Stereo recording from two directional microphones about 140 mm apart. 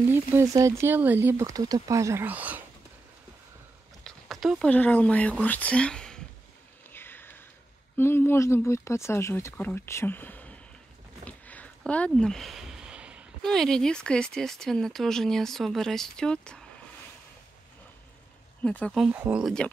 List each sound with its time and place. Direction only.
0.1 s speech: 15° right (ahead or behind)
4.0 s a sound: centre (ahead or behind)
4.6 s speech: 10° left (ahead or behind)
6.9 s a sound: 15° left (ahead or behind)
8.0 s speech: 15° left (ahead or behind)
11.2 s a sound: 10° left (ahead or behind); by 13.3 s 10° right (ahead or behind)
13.4 s speech: 5° left (ahead or behind)
18.6 s speech: 10° left (ahead or behind)
18.9 s speech: 10° right (ahead or behind)
19.4 s speech: 5° left (ahead or behind)